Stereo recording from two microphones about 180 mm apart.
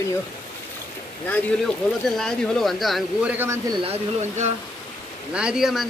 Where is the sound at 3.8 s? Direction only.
40° right (ahead or behind).